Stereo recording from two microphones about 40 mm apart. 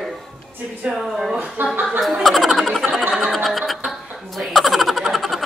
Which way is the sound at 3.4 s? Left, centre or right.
Centre.